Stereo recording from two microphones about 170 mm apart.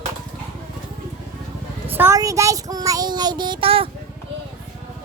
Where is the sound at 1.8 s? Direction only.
10° right (ahead or behind); by 3.9 s 35° right (ahead or behind).